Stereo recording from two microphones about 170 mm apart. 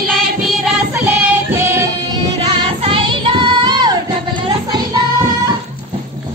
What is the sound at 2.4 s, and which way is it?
Music, 25° right (ahead or behind).